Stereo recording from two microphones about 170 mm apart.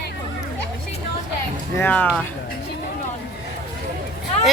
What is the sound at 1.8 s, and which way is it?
Speech, 10° left (ahead or behind).